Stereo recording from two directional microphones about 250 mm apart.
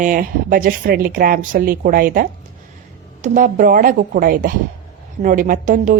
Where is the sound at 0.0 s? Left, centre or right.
Right.